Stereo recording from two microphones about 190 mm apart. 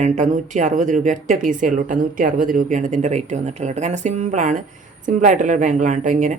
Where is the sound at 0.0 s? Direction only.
40° right (ahead or behind).